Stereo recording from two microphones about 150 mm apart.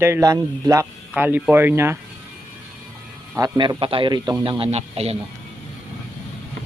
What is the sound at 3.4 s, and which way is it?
A man's voice, 25° right (ahead or behind).